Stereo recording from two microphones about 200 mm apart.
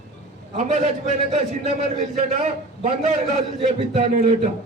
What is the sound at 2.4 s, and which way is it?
A man's voice, 40° right (ahead or behind).